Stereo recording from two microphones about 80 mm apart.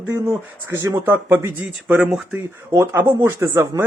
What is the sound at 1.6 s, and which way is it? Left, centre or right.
Speech, centre.